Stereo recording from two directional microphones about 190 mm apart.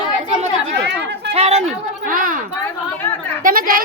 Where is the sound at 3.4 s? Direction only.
50° right (ahead or behind).